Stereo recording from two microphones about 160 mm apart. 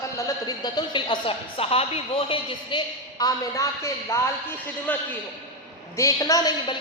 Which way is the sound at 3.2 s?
20° left (ahead or behind).